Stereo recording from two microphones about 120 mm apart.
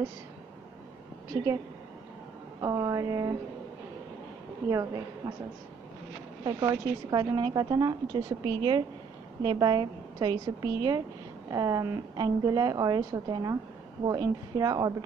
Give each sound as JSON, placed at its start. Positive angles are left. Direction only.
{"t": 2.6, "sound": "a woman's voice", "side_deg": -30}
{"t": 4.6, "sound": "a woman's voice", "side_deg": -30}
{"t": 6.4, "sound": "a woman's voice", "side_deg": -30}